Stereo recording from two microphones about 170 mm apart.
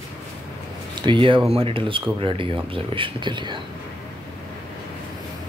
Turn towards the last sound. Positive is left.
turn(degrees=-25)  # may be behind; listen again after turning